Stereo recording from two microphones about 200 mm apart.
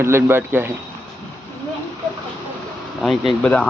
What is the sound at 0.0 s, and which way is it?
Speech, 10° right (ahead or behind).